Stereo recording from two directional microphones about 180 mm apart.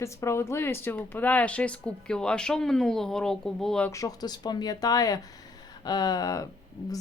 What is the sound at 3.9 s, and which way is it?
Speech, 20° left (ahead or behind).